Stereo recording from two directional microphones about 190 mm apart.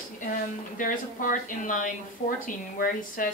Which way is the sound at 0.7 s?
45° left (ahead or behind).